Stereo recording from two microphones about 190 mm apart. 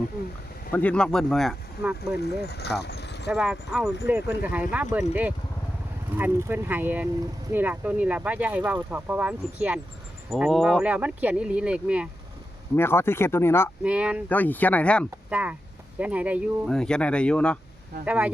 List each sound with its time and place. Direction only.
0.7 s speech: 10° left (ahead or behind)
2.5 s speech: 60° left (ahead or behind)
3.3 s speech: 5° right (ahead or behind)
12.7 s speech: 10° left (ahead or behind)
13.8 s speech: 5° right (ahead or behind)
14.3 s speech: 10° left (ahead or behind)
15.3 s speech: 5° right (ahead or behind)
16.7 s speech: 5° left (ahead or behind)
18.0 s speech: 10° right (ahead or behind)